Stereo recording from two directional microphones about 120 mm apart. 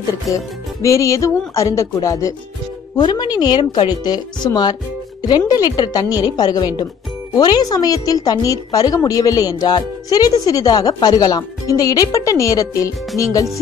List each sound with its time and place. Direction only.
0.8 s music: 25° left (ahead or behind)
3.0 s a woman's voice: 35° left (ahead or behind)
13.2 s music: 30° left (ahead or behind)